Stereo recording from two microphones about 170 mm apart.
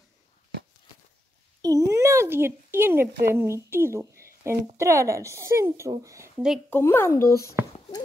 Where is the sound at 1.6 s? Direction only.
20° right (ahead or behind).